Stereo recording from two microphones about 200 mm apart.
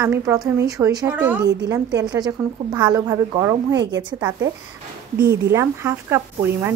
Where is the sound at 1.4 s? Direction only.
55° right (ahead or behind).